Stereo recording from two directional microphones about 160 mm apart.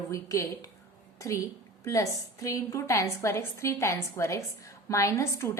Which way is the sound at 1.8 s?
20° left (ahead or behind).